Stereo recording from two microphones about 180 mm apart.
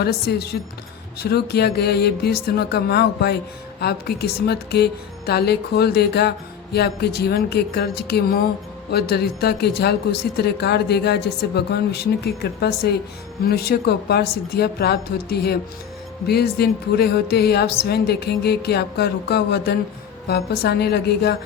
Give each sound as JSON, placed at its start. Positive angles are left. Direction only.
{"t": 0.0, "sound": "speech", "side_deg": 60}